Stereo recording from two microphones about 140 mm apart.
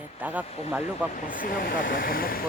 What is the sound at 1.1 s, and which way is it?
Speech, 80° left.